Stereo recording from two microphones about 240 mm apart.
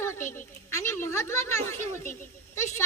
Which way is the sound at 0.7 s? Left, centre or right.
Centre.